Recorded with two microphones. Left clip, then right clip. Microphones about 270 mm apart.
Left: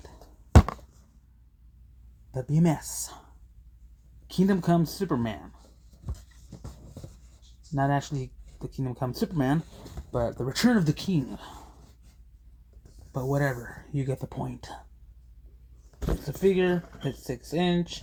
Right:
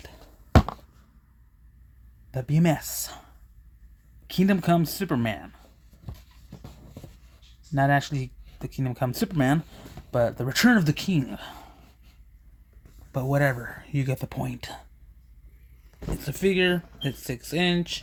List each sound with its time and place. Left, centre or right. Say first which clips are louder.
0.5 s a sound: right 1 dB; centre
2.3 s speech: right 3 dB; right
4.3 s speech: right 2 dB; right
7.7 s speech: right 4 dB; right
13.1 s speech: right 4 dB; right
16.2 s speech: right 1 dB; right